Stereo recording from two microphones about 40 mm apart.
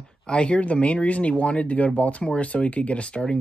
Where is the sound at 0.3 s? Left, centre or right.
Left.